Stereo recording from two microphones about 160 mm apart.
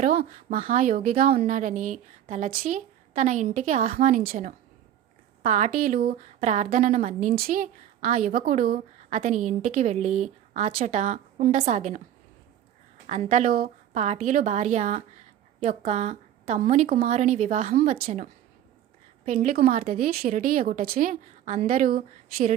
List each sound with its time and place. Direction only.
0.0 s a woman's voice: 60° right (ahead or behind)
6.5 s a woman's voice: 50° right (ahead or behind)
11.8 s a woman's voice: 45° right (ahead or behind)
13.1 s speech: 50° right (ahead or behind)
14.0 s a woman's voice: 50° right (ahead or behind)
17.7 s a woman's voice: 65° right (ahead or behind)